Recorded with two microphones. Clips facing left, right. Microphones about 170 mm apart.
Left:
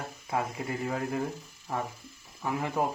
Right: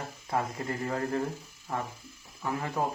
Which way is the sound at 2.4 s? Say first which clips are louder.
Left 1 dB; 15° left (ahead or behind).